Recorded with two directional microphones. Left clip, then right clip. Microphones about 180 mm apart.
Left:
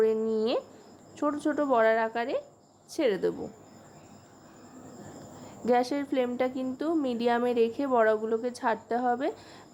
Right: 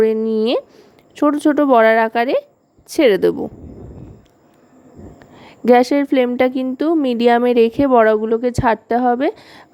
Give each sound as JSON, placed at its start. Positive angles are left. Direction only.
{"t": 0.0, "sound": "a sound", "side_deg": -45}
{"t": 1.1, "sound": "speech", "side_deg": -45}
{"t": 5.6, "sound": "speech", "side_deg": -45}